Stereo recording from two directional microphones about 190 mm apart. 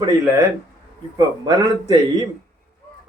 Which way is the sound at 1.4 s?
20° right (ahead or behind).